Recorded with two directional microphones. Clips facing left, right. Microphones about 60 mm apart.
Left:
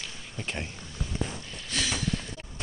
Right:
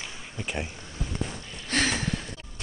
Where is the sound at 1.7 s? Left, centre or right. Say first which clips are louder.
Right 5 dB; right.